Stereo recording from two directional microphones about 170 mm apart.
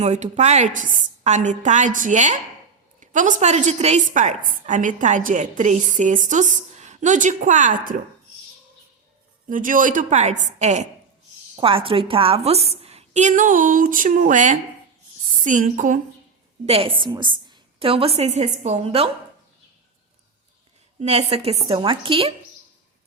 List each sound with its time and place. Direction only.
0.0 s a woman's voice: 40° right (ahead or behind)
9.5 s a woman's voice: 50° right (ahead or behind)
11.5 s a woman's voice: 30° right (ahead or behind); by 16.0 s 50° right (ahead or behind)
16.6 s a woman's voice: 35° right (ahead or behind)
21.0 s a woman's voice: 40° right (ahead or behind)